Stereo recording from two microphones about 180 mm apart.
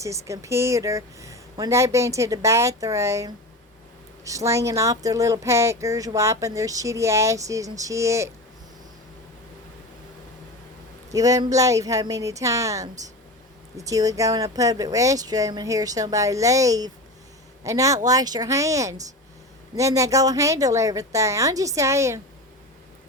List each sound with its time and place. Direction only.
0.0 s speech: 15° right (ahead or behind)
11.1 s speech: 20° right (ahead or behind)